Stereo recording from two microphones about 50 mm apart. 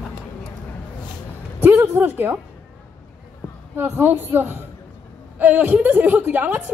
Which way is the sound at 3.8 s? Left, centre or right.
Right.